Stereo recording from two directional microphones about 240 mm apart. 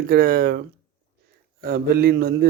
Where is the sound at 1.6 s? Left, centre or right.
Right.